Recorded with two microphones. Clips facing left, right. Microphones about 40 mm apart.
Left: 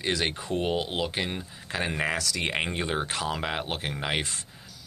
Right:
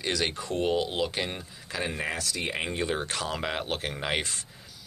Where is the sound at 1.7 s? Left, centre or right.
Left.